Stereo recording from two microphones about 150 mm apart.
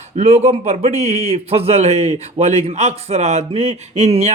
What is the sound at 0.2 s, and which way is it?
Speech, 45° right (ahead or behind).